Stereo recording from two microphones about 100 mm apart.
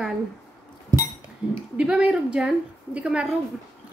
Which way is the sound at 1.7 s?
10° right (ahead or behind).